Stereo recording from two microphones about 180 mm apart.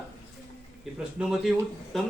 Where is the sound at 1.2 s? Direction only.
Centre (ahead or behind).